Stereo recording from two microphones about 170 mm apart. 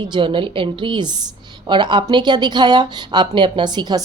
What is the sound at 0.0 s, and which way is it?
Speech, 30° right (ahead or behind).